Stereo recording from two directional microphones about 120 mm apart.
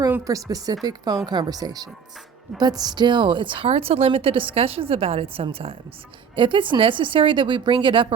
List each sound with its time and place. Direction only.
0.3 s a woman's voice: 30° right (ahead or behind)
3.7 s a woman's voice: 55° right (ahead or behind)